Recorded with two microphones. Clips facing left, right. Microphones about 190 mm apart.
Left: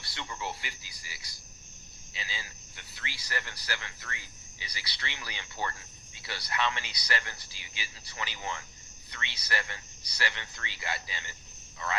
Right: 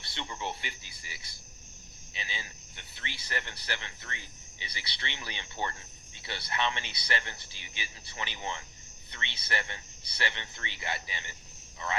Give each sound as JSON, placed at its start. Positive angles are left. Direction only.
{"t": 0.0, "sound": "speech", "side_deg": -20}